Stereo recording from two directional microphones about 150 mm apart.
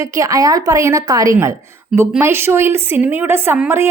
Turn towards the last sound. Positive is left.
turn(degrees=-15)  # may be behind; listen again after turning